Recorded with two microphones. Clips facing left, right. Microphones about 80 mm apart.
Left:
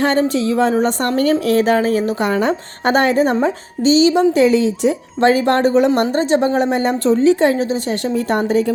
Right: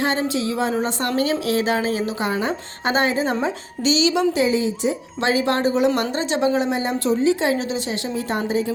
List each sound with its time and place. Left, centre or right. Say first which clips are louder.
0.3 s a woman's voice: left 6 dB; left
3.4 s speech: left 6 dB; left
4.4 s a woman's voice: left 6 dB; left
5.2 s a woman's voice: left 6 dB; left
6.0 s a woman's voice: left 6 dB; left
7.4 s a woman's voice: left 6 dB; left